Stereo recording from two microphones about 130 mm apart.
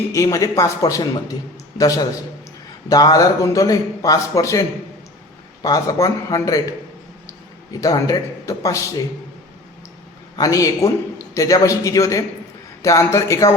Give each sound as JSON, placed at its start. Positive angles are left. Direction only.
{"t": 0.1, "sound": "a man's voice", "side_deg": 25}
{"t": 5.6, "sound": "a man's voice", "side_deg": 25}
{"t": 7.7, "sound": "a man's voice", "side_deg": 30}
{"t": 10.3, "sound": "a man's voice", "side_deg": 25}